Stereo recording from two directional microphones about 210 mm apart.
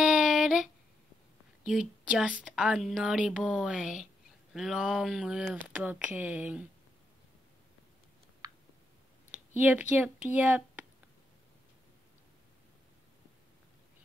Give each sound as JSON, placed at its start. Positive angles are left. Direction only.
{"t": 0.0, "sound": "a sound", "side_deg": 0}
{"t": 1.6, "sound": "speech", "side_deg": -5}
{"t": 9.3, "sound": "speech", "side_deg": -10}